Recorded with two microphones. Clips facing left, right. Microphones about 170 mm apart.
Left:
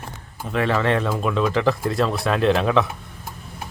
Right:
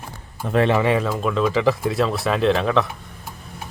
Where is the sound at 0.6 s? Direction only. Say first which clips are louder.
Right 3 dB; 20° right (ahead or behind).